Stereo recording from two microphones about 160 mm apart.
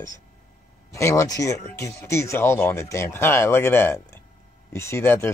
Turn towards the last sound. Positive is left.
turn(degrees=15)  # may be behind; listen again after turning